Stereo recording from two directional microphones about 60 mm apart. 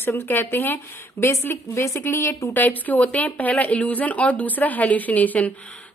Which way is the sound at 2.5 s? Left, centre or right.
Left.